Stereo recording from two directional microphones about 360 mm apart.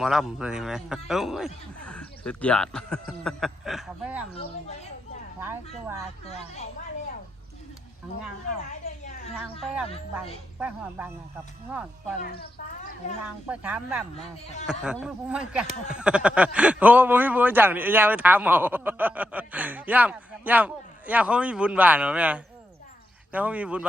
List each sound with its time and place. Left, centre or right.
0.0 s speech: centre
6.2 s speech: centre
10.6 s speech: centre
12.2 s speech: left
13.5 s speech: centre